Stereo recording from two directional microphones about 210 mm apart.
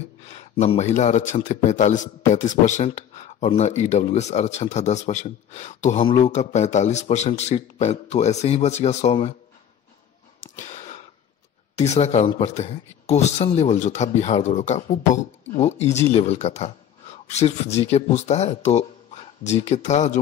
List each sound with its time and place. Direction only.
0.3 s a man's voice: 30° left (ahead or behind)
10.4 s a sound: 35° left (ahead or behind)
11.7 s a man's voice: 30° left (ahead or behind)